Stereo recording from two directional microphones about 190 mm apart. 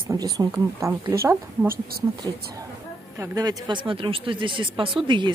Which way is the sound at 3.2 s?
20° right (ahead or behind).